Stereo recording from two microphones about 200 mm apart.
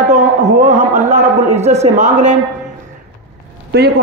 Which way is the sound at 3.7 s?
55° right (ahead or behind).